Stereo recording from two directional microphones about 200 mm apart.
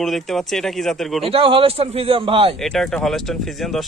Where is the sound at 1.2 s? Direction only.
25° right (ahead or behind).